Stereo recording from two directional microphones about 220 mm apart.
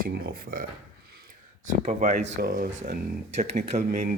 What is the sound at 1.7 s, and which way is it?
Speech, 35° right (ahead or behind).